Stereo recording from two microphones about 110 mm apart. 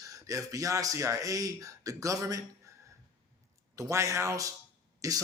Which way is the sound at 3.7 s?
30° right (ahead or behind).